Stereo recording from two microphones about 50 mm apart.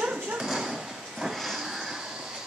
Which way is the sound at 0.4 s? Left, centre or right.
Centre.